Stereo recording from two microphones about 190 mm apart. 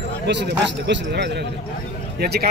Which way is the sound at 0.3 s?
65° right (ahead or behind).